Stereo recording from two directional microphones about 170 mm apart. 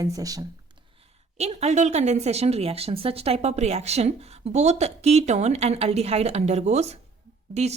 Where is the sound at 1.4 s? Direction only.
40° right (ahead or behind).